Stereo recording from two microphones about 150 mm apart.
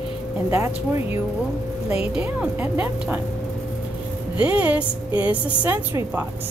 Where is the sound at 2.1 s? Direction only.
10° right (ahead or behind).